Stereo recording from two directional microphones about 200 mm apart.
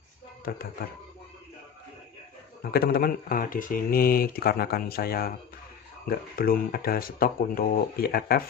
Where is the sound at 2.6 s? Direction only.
50° left (ahead or behind).